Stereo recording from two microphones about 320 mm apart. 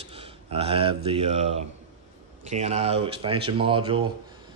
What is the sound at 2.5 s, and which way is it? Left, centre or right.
Speech, centre.